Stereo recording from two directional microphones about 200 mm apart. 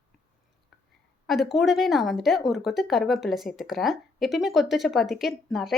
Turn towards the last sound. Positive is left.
turn(degrees=0)  # may be behind; listen again after turning